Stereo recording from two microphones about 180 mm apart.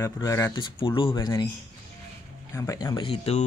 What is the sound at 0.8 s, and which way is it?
Speech, 30° left (ahead or behind).